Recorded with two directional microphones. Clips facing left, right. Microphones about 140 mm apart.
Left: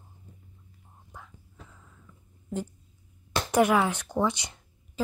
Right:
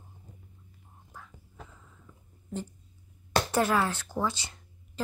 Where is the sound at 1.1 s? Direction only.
20° left (ahead or behind).